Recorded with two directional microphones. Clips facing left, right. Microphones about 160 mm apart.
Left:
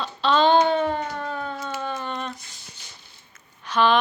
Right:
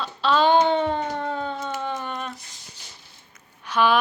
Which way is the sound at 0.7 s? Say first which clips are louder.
Right 1 dB; 20° right (ahead or behind).